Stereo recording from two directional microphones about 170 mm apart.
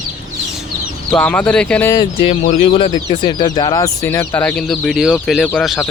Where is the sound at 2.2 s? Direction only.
45° left (ahead or behind).